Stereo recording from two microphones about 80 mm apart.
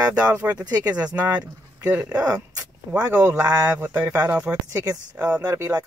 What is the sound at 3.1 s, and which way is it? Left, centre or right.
Speech, right.